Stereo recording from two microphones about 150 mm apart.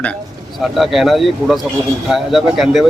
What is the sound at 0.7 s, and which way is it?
Speech, centre (ahead or behind).